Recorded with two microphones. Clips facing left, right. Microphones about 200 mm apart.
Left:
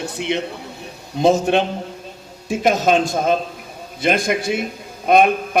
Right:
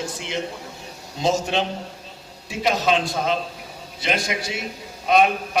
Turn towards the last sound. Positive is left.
turn(degrees=55)  # may be behind; listen again after turning